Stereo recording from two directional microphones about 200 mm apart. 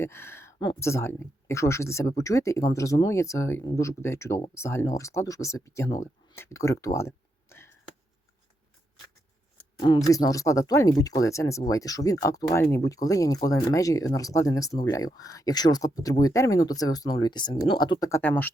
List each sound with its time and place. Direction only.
0.0 s a sound: 10° left (ahead or behind)
0.7 s speech: 15° left (ahead or behind)
9.8 s speech: 20° left (ahead or behind)